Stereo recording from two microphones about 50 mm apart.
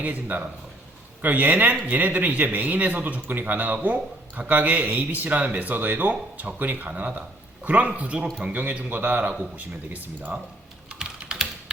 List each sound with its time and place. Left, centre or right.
0.0 s a man's voice: right
10.9 s typing: centre